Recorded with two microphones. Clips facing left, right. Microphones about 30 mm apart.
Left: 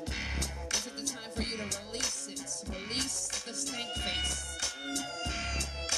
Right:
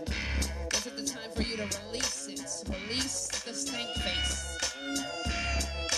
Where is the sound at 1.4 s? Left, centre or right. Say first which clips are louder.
Right 3 dB; centre.